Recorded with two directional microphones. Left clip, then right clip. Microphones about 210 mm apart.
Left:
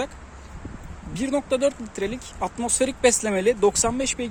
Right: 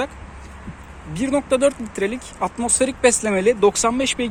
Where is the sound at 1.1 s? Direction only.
10° left (ahead or behind).